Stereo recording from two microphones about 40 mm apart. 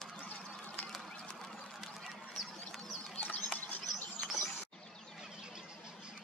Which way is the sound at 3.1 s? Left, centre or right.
Left.